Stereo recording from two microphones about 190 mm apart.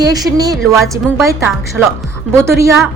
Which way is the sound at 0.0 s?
20° right (ahead or behind).